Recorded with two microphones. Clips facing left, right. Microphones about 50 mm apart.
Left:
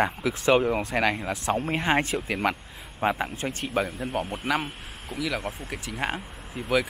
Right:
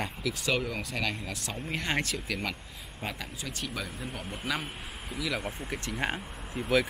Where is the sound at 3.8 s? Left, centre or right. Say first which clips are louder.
Left 6 dB; centre.